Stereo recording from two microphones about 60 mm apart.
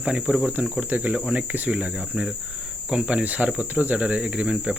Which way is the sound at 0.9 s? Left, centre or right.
Right.